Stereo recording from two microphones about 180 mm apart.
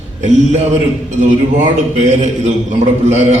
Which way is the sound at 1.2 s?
40° right (ahead or behind).